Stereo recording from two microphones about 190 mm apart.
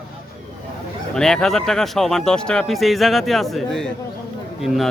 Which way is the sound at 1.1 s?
5° left (ahead or behind).